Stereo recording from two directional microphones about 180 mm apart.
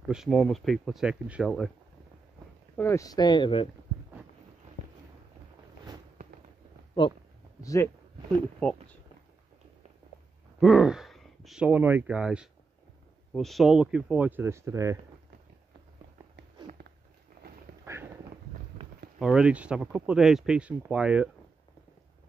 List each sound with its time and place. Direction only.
0.0 s speech: 5° right (ahead or behind)
2.8 s speech: 15° left (ahead or behind)
7.6 s speech: 15° left (ahead or behind)
8.6 s speech: 5° left (ahead or behind)
10.6 s speech: 5° right (ahead or behind)
16.6 s a sound: 25° right (ahead or behind)
17.8 s a sound: 15° right (ahead or behind)
19.1 s speech: 5° right (ahead or behind)